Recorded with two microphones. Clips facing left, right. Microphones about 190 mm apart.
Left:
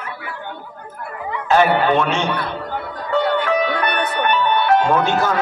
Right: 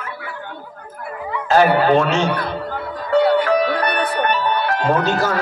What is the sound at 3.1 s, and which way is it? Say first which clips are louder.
Music: right 4 dB; 40° right (ahead or behind).